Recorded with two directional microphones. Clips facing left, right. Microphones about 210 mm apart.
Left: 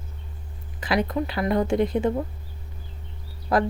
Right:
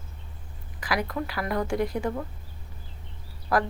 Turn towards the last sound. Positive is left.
turn(degrees=20)  # may be behind; listen again after turning